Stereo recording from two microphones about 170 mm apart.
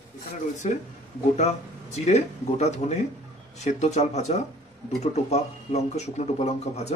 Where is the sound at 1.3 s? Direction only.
40° left (ahead or behind).